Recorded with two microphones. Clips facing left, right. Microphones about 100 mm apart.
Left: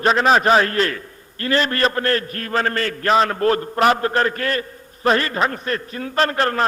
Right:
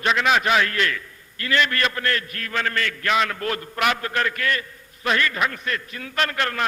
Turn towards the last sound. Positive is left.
turn(degrees=35)  # may be behind; listen again after turning